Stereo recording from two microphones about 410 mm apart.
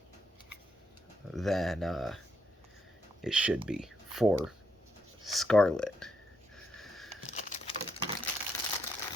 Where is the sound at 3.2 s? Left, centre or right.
Centre.